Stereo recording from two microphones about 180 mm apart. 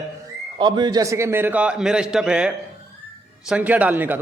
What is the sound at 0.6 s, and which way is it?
A man's voice, 25° right (ahead or behind).